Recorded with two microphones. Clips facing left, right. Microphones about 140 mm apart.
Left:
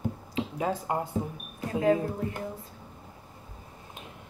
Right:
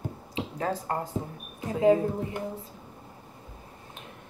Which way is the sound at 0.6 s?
10° left (ahead or behind).